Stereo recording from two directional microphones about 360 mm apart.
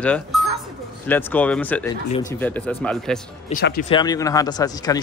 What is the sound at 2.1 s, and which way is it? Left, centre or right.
Speech, centre.